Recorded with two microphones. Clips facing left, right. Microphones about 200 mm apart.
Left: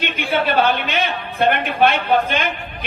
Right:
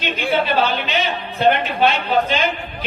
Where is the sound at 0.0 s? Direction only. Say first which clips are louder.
Even; 55° left (ahead or behind).